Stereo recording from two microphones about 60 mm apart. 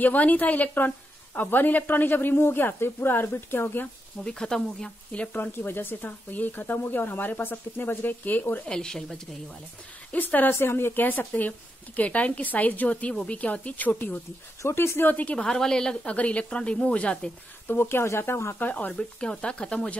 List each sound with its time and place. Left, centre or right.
0.0 s speech: left
4.2 s a woman's voice: centre
5.1 s speech: left
5.4 s speech: left
8.6 s a woman's voice: centre
10.1 s speech: left
10.5 s speech: left
14.6 s speech: left
15.3 s a woman's voice: centre
17.6 s speech: left
18.6 s speech: left
18.9 s a woman's voice: centre